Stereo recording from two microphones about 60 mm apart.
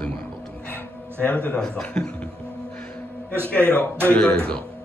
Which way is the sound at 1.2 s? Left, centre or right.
Left.